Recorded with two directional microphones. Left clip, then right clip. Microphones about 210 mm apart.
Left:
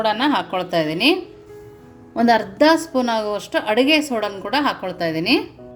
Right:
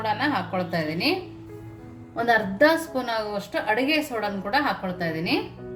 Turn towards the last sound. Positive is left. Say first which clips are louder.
# left 7 dB
turn(degrees=45)  # may be behind; listen again after turning